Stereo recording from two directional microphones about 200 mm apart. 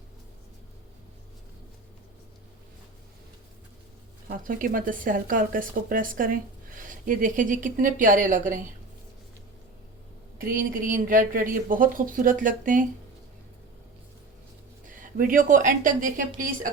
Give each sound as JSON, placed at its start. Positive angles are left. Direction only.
{"t": 4.3, "sound": "speech", "side_deg": -45}
{"t": 10.3, "sound": "speech", "side_deg": -45}
{"t": 14.8, "sound": "speech", "side_deg": -45}